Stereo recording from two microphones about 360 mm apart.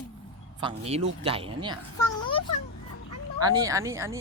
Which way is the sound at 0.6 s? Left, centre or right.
Centre.